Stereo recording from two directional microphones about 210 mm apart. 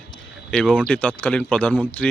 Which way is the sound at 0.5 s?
5° left (ahead or behind).